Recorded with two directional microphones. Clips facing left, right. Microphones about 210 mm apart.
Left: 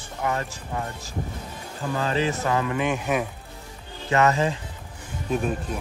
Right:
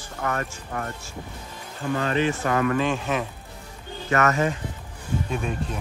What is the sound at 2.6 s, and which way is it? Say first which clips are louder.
Speech: right 2 dB; 15° left (ahead or behind).